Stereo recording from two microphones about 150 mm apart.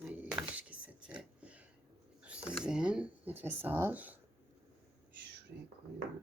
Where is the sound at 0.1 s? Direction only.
10° right (ahead or behind).